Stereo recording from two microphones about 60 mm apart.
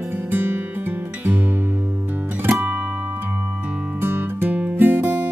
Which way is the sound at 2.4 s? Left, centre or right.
Right.